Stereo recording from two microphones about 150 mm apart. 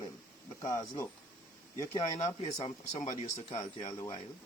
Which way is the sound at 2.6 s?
45° left (ahead or behind).